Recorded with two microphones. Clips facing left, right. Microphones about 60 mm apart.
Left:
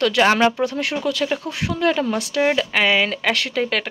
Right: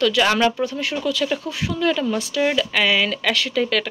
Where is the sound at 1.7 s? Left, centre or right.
Left.